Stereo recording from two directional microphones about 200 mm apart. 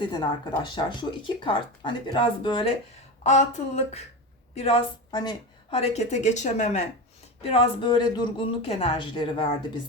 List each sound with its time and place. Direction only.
0.0 s speech: 20° left (ahead or behind)
3.2 s a woman's voice: 35° left (ahead or behind)